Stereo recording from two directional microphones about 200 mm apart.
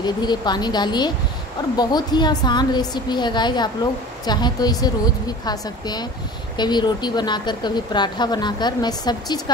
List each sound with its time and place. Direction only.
0.0 s speech: 20° left (ahead or behind)